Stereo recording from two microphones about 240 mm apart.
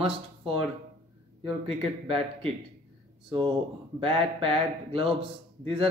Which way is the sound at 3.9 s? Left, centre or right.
Right.